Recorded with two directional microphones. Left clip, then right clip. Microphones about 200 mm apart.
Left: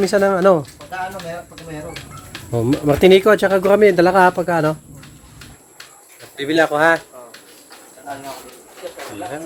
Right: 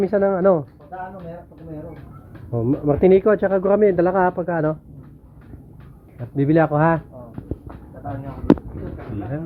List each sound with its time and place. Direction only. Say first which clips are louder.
0.0 s speech: left 3 dB; 15° left (ahead or behind)
2.5 s speech: left 3 dB; 25° left (ahead or behind)
6.3 s speech: left 1 dB; 5° left (ahead or behind)